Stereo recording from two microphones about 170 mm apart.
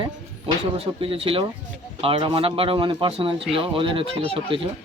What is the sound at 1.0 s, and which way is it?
Speech, 35° right (ahead or behind).